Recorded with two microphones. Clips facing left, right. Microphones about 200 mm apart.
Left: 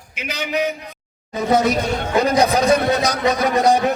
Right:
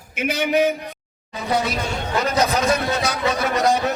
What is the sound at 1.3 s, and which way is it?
Speech, 45° left (ahead or behind).